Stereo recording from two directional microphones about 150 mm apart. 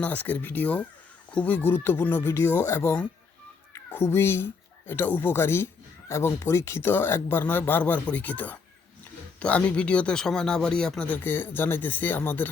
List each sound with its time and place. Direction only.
0.0 s speech: 10° left (ahead or behind)